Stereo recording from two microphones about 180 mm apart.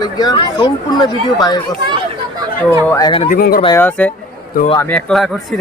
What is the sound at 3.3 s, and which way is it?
Speech, 55° left (ahead or behind).